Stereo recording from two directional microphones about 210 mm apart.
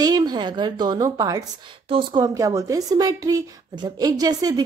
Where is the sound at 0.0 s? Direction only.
20° right (ahead or behind).